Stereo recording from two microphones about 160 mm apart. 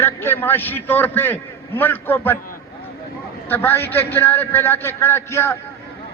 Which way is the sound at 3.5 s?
15° left (ahead or behind).